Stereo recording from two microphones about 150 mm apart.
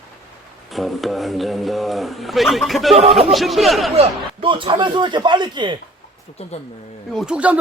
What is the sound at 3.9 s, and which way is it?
A man's voice, 40° right (ahead or behind).